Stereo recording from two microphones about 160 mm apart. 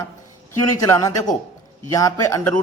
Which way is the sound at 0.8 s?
20° left (ahead or behind).